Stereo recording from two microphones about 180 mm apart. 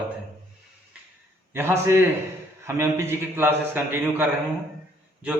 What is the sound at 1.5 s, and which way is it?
A man's voice, 15° right (ahead or behind).